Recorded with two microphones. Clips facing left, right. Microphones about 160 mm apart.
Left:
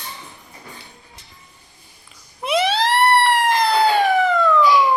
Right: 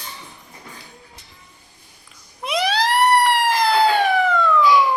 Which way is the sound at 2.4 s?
Centre (ahead or behind).